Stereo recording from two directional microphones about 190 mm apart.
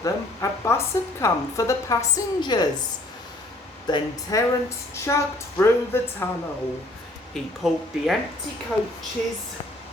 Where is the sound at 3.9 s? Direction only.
25° left (ahead or behind).